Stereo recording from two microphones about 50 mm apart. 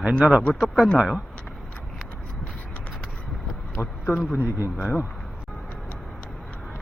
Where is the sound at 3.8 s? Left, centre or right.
Left.